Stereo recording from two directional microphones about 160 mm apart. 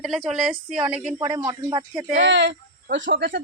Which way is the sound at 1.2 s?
20° right (ahead or behind).